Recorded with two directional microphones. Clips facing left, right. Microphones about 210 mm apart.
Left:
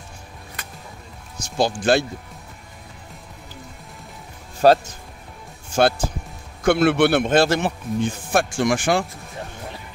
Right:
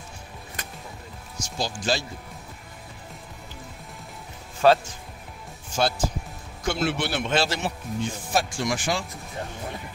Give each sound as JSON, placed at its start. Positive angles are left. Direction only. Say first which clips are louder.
{"t": 1.4, "sound": "speech", "louder": "left 9 dB", "side_deg": 60}
{"t": 4.6, "sound": "speech", "louder": "left 4 dB", "side_deg": 40}
{"t": 5.8, "sound": "speech", "louder": "left 6 dB", "side_deg": 60}